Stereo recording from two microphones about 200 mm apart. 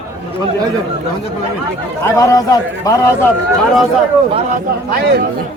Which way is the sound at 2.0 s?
15° left (ahead or behind).